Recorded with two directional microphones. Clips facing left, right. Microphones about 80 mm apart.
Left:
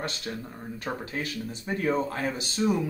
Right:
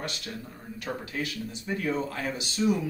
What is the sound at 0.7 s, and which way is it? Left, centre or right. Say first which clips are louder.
Speech: even; left.